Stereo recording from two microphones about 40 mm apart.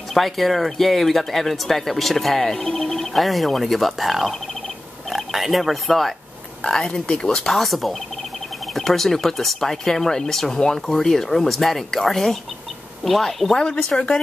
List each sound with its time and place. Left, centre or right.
0.1 s speech: centre
7.5 s speech: centre
13.6 s speech: centre